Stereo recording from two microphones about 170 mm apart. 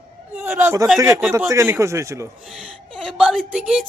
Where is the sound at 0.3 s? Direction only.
15° right (ahead or behind).